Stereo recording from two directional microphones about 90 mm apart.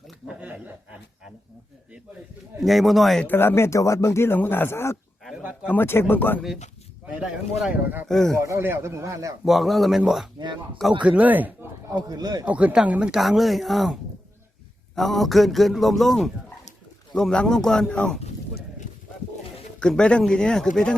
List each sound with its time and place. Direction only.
0.3 s a sound: 15° right (ahead or behind)
2.6 s a man's voice: centre (ahead or behind)
3.2 s speech: 25° left (ahead or behind)
5.4 s a sound: 15° right (ahead or behind)
5.7 s speech: 25° left (ahead or behind)
8.0 s a man's voice: 5° left (ahead or behind)
8.4 s speech: 30° right (ahead or behind)
9.4 s a man's voice: centre (ahead or behind)
11.0 s speech: 15° right (ahead or behind)
11.9 s speech: 50° right (ahead or behind)
12.5 s speech: 15° right (ahead or behind)
13.1 s a man's voice: centre (ahead or behind)
14.9 s a man's voice: centre (ahead or behind)
19.8 s speech: 10° left (ahead or behind)